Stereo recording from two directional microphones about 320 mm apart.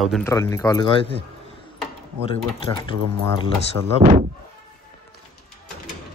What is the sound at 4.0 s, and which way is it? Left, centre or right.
Speech, right.